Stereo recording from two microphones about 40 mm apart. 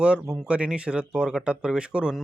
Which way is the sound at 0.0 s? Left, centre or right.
Right.